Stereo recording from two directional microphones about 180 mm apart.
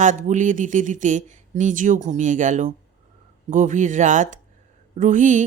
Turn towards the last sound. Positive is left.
turn(degrees=-45)  # may be behind; listen again after turning